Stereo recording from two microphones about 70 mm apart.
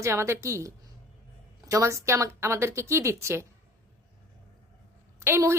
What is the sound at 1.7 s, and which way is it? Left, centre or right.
Speech, right.